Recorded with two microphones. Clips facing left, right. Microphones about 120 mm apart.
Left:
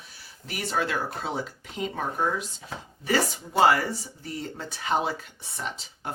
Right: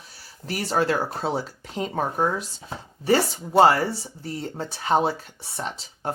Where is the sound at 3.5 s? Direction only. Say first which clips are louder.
Right 4 dB; 30° right (ahead or behind).